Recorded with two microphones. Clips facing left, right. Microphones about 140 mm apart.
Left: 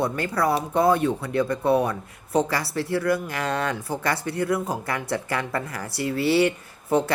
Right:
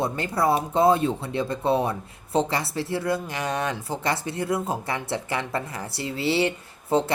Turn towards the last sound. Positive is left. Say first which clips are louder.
# left 1 dB
turn(degrees=-25)  # may be behind; listen again after turning